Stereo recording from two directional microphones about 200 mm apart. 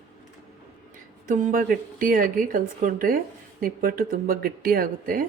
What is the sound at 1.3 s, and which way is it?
Speech, 40° right (ahead or behind).